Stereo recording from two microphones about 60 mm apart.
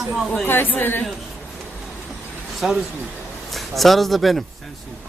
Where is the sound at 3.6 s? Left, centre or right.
Centre.